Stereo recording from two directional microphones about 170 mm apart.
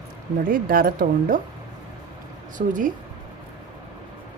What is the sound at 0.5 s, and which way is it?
Speech, 60° right (ahead or behind).